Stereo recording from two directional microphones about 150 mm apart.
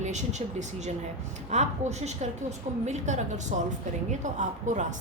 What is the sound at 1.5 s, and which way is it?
A woman's voice, 50° right (ahead or behind).